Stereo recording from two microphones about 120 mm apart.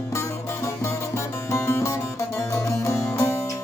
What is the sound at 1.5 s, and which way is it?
Music, 25° left (ahead or behind).